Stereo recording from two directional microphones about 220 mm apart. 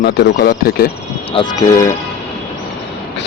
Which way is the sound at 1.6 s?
15° left (ahead or behind).